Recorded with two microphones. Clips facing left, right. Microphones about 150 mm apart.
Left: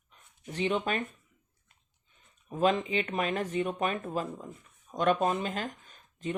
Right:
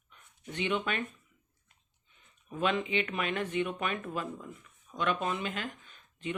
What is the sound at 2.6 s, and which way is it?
Speech, 35° left (ahead or behind).